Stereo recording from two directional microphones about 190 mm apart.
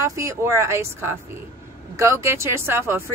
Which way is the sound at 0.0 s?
15° right (ahead or behind).